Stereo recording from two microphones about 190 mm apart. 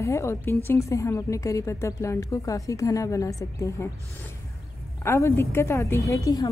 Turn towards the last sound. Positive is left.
turn(degrees=15)  # may be behind; listen again after turning